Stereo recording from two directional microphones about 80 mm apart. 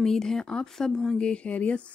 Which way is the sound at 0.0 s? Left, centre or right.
Centre.